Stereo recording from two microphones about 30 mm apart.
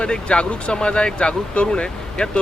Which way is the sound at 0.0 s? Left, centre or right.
Left.